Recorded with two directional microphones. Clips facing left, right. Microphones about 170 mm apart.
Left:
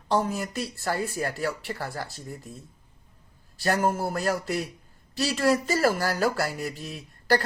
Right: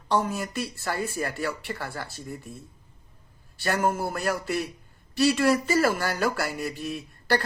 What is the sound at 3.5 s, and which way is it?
Speech, 35° left (ahead or behind).